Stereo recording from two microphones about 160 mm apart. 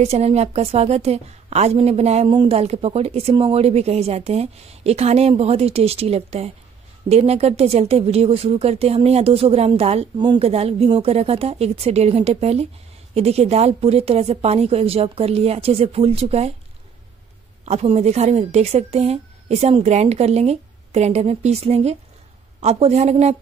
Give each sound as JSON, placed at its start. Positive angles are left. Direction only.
{"t": 0.0, "sound": "a woman's voice", "side_deg": -40}
{"t": 17.6, "sound": "a woman's voice", "side_deg": -45}